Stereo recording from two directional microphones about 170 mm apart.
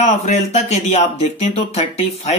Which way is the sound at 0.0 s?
40° left (ahead or behind).